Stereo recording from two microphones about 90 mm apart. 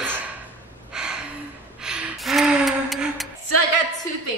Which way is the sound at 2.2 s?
5° right (ahead or behind).